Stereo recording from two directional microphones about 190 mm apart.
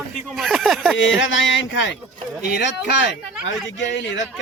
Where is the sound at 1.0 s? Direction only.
75° left (ahead or behind).